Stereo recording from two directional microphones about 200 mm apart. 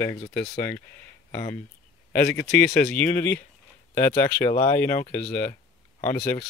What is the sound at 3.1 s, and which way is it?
Speech, 45° left (ahead or behind).